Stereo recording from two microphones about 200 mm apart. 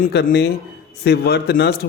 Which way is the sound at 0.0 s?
50° left (ahead or behind).